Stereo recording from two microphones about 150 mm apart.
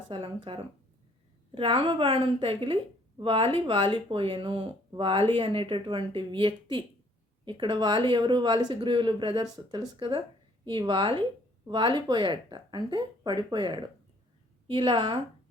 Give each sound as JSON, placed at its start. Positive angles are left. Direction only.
{"t": 0.1, "sound": "speech", "side_deg": -35}